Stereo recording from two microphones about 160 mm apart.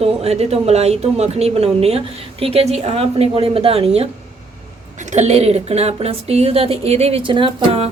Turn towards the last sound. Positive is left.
turn(degrees=-30)  # may be behind; listen again after turning